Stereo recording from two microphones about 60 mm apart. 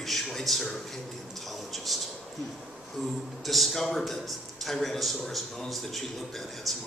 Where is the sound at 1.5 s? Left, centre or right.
Centre.